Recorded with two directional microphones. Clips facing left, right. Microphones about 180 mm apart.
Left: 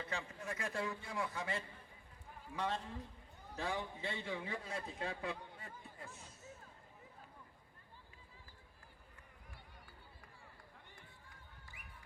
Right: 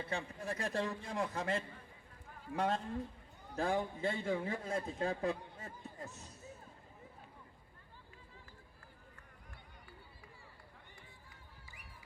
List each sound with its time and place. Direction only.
0.0 s a man's voice: 30° right (ahead or behind)